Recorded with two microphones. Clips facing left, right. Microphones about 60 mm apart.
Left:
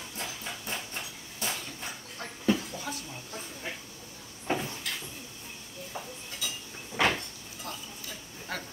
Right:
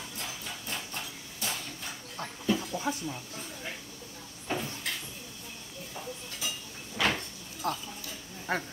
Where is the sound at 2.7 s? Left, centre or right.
Right.